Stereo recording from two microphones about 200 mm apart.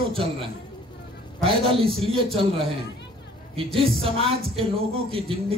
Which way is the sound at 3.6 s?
30° right (ahead or behind).